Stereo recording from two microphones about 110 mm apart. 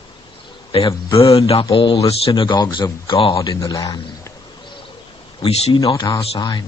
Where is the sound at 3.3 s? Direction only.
35° left (ahead or behind).